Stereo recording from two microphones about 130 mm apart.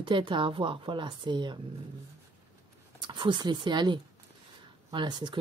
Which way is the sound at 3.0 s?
35° right (ahead or behind).